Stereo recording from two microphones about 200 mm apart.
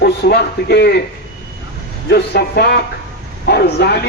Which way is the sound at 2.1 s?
55° left (ahead or behind).